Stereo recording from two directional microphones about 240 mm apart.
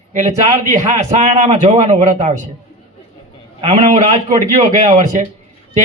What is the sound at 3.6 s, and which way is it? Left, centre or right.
A man's voice, right.